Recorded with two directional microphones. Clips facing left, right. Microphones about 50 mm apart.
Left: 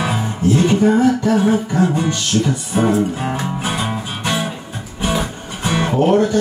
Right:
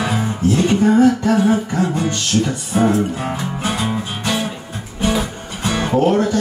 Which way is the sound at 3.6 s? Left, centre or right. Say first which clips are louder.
Right 1 dB; left.